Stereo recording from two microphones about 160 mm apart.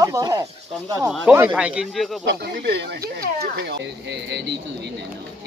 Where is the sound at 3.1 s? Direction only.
90° right.